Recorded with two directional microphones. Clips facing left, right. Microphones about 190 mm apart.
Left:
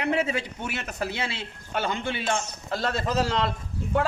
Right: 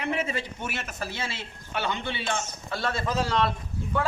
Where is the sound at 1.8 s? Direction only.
45° left (ahead or behind).